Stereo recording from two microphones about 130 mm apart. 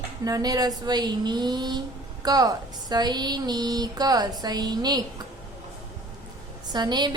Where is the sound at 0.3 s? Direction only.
30° right (ahead or behind).